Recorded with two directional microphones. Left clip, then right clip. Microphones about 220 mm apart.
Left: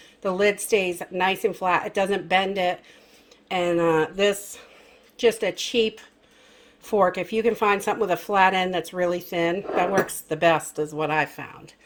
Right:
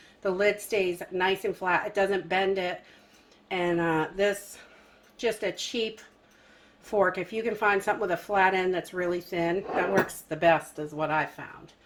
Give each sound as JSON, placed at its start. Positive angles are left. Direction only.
{"t": 0.2, "sound": "speech", "side_deg": 35}
{"t": 6.9, "sound": "speech", "side_deg": 40}